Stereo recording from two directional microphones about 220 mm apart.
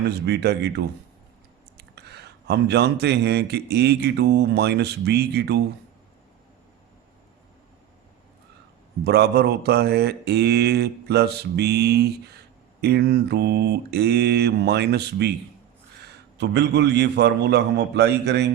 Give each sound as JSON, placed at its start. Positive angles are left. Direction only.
{"t": 0.1, "sound": "speech", "side_deg": -50}
{"t": 2.0, "sound": "speech", "side_deg": -50}
{"t": 9.0, "sound": "speech", "side_deg": -50}
{"t": 16.4, "sound": "speech", "side_deg": -50}